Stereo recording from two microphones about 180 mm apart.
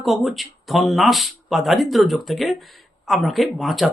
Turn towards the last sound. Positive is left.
turn(degrees=0)  # may be behind; listen again after turning